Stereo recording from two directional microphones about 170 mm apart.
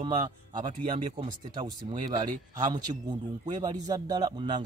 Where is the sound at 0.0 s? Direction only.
40° right (ahead or behind).